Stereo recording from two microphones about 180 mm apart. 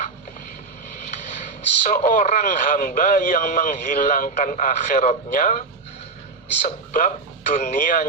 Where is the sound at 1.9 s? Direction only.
45° left (ahead or behind).